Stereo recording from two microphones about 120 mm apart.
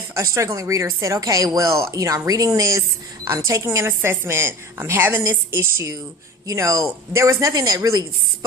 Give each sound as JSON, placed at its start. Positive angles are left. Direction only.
{"t": 0.1, "sound": "speech", "side_deg": -25}